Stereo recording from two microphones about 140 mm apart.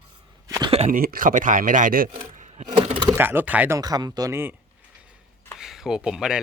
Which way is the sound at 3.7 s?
30° right (ahead or behind).